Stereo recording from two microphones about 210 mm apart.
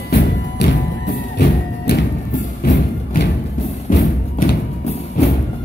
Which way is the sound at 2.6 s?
40° left (ahead or behind).